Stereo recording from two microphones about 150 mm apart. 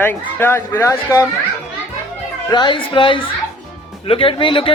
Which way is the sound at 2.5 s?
30° left (ahead or behind).